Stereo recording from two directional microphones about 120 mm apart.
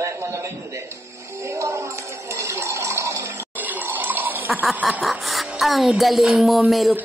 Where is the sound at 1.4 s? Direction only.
25° right (ahead or behind).